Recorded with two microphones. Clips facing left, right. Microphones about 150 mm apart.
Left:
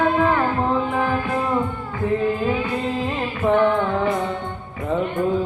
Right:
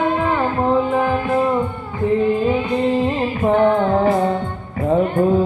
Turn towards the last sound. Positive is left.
turn(degrees=-50)  # may be behind; listen again after turning